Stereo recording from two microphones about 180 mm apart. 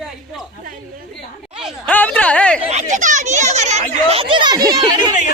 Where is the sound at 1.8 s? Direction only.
10° left (ahead or behind).